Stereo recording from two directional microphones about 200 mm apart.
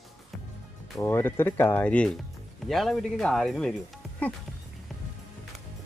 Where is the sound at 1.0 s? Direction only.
10° left (ahead or behind).